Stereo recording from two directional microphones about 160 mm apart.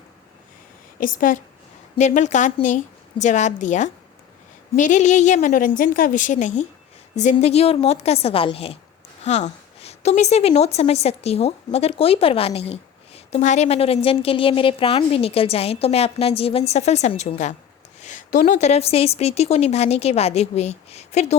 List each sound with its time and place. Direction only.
0.9 s a woman's voice: 60° left (ahead or behind)
2.0 s a woman's voice: 45° left (ahead or behind)